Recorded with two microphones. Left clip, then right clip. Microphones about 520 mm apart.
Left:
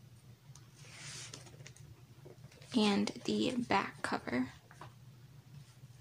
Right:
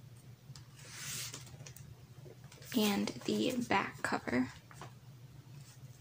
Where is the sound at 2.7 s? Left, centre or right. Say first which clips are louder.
Left 1 dB; left.